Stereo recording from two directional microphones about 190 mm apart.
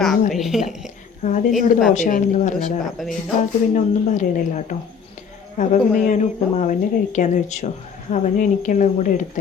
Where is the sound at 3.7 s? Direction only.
40° left (ahead or behind).